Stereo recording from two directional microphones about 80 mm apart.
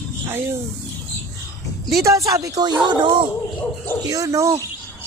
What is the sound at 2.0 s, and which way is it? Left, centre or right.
Speech, right.